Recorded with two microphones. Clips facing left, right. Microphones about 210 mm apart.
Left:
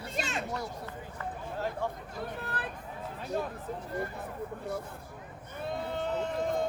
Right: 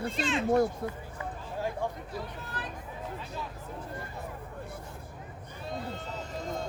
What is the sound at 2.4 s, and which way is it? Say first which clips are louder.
Speech: left 2 dB; 55° left (ahead or behind).